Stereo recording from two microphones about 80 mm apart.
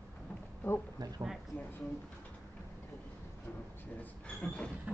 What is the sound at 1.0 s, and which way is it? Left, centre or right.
Speech, right.